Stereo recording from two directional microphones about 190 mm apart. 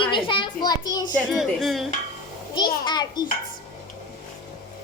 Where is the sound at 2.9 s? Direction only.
25° left (ahead or behind).